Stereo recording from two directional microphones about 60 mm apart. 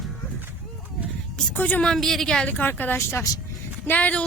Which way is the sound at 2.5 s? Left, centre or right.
Left.